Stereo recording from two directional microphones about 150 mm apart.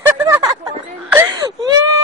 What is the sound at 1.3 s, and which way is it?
Wail, 25° right (ahead or behind).